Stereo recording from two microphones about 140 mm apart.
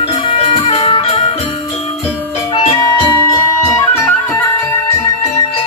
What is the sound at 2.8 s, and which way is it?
Music, 25° left (ahead or behind).